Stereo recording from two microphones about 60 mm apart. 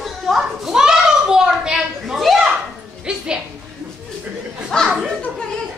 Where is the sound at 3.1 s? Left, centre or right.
Centre.